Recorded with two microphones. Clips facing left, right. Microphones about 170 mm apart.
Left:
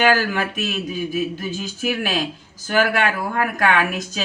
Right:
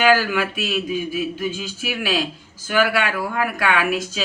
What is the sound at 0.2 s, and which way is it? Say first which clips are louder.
Speech: even; 40° left (ahead or behind).